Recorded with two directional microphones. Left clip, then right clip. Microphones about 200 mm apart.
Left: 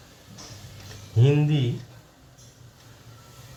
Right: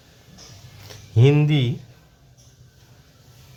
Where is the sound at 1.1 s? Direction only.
40° right (ahead or behind).